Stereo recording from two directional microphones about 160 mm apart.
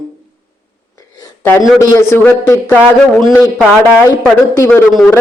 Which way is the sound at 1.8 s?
20° left (ahead or behind).